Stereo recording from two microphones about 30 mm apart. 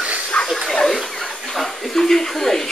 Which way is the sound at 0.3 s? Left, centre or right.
Left.